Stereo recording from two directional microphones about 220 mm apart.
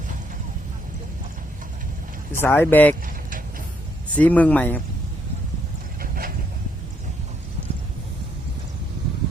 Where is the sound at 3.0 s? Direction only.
40° right (ahead or behind).